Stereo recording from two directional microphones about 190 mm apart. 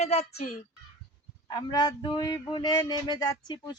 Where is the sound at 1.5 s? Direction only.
20° left (ahead or behind).